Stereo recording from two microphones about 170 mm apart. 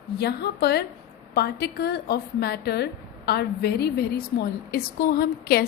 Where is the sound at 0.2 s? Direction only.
70° left (ahead or behind).